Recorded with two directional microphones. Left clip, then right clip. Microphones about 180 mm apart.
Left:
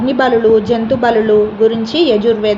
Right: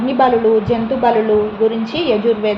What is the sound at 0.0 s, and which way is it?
A woman's voice, 50° left (ahead or behind).